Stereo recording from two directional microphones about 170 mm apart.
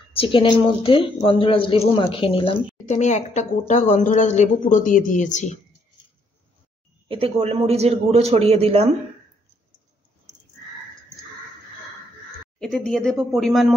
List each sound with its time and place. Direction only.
0.1 s a woman's voice: 30° left (ahead or behind)
7.1 s a man's voice: 35° right (ahead or behind)
12.5 s speech: 5° left (ahead or behind)